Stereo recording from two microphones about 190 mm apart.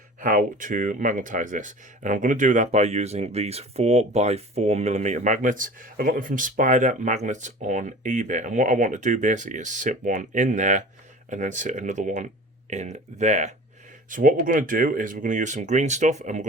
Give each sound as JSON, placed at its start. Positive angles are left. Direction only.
{"t": 0.2, "sound": "speech", "side_deg": -45}